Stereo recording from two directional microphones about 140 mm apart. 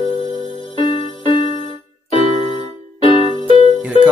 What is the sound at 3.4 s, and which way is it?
Music, 35° left (ahead or behind).